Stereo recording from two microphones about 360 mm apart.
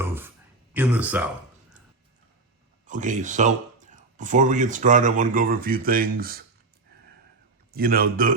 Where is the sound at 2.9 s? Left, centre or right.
Right.